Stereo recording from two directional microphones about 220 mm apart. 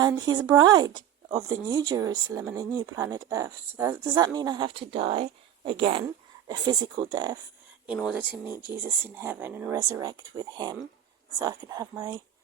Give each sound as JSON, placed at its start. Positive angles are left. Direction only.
{"t": 0.0, "sound": "speech", "side_deg": -15}
{"t": 7.9, "sound": "speech", "side_deg": -5}